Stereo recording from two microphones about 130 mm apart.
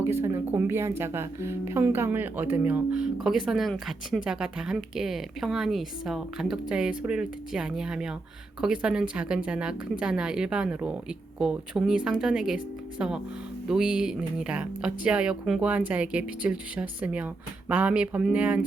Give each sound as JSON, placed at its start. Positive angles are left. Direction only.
{"t": 0.0, "sound": "a woman's voice", "side_deg": -20}